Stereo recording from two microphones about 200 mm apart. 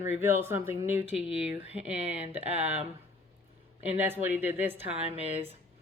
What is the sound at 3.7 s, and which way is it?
A woman's voice, 10° right (ahead or behind).